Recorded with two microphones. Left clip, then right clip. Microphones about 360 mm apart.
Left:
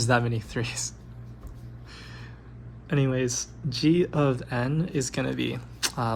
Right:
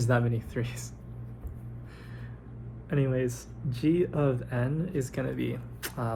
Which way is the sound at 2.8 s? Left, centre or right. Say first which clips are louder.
Left 3 dB; left.